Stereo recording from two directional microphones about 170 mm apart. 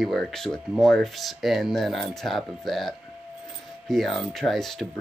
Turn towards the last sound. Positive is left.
turn(degrees=0)  # may be behind; listen again after turning